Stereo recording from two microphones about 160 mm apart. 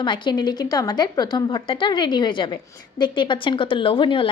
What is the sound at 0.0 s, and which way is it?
Speech, 30° left (ahead or behind).